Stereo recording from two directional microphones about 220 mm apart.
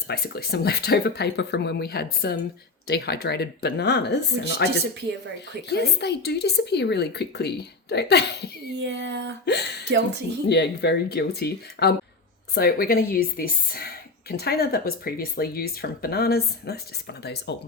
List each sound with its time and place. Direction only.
0.1 s a woman's voice: 45° left (ahead or behind)
6.0 s a woman's voice: 50° left (ahead or behind)
8.7 s speech: 50° right (ahead or behind)
10.5 s a woman's voice: 50° left (ahead or behind)